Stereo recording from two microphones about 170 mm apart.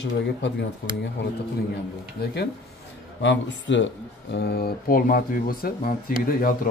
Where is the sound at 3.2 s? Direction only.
90° left.